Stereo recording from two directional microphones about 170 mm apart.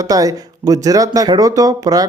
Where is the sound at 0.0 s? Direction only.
20° right (ahead or behind).